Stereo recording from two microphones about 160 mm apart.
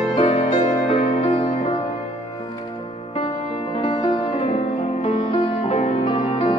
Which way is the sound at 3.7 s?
30° left (ahead or behind).